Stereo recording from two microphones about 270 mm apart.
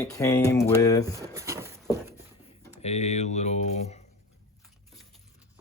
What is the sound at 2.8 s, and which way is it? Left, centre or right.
Speech, left.